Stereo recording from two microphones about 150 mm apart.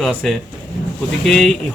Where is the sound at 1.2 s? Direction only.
Centre (ahead or behind).